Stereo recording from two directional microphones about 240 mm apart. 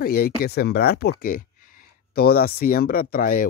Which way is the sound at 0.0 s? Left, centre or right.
Left.